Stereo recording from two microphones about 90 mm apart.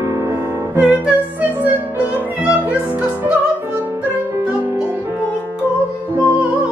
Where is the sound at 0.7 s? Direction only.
10° right (ahead or behind).